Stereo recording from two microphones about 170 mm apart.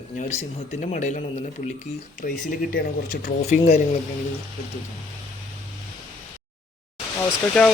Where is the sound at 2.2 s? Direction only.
60° left (ahead or behind); by 3.8 s 45° left (ahead or behind).